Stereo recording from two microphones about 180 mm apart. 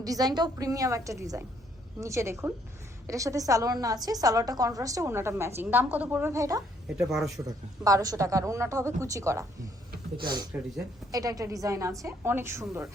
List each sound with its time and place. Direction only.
0.0 s a woman's voice: 20° right (ahead or behind)
6.8 s speech: 5° right (ahead or behind)
7.4 s a woman's voice: 20° right (ahead or behind)